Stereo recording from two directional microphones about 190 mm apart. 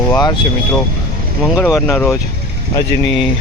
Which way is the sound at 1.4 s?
10° left (ahead or behind).